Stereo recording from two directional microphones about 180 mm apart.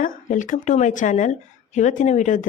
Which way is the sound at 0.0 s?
45° left (ahead or behind).